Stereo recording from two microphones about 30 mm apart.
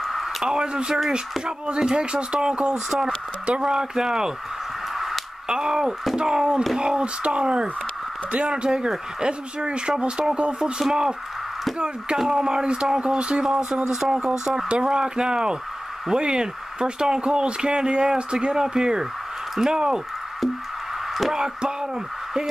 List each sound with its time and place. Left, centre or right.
0.0 s a sound: centre
0.4 s speech: right
2.7 s speech: centre
5.5 s speech: right
12.3 s speech: right
13.8 s speech: centre